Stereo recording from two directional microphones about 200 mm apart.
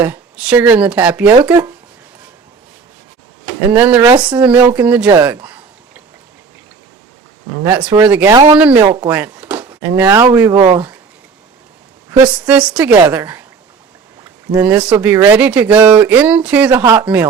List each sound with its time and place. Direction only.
0.0 s speech: 5° right (ahead or behind)
3.7 s speech: 10° right (ahead or behind)
4.1 s speech: 20° right (ahead or behind)
4.4 s speech: 5° right (ahead or behind)
5.0 s a sound: 15° right (ahead or behind)
7.6 s speech: 5° right (ahead or behind)
12.2 s speech: 5° right (ahead or behind)
14.5 s speech: 5° right (ahead or behind)